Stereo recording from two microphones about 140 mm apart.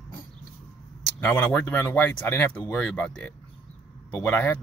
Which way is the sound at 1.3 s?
10° left (ahead or behind).